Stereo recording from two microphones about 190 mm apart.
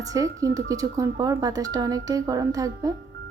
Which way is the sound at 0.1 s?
15° right (ahead or behind).